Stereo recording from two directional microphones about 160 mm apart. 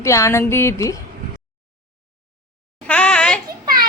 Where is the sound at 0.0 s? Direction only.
20° left (ahead or behind).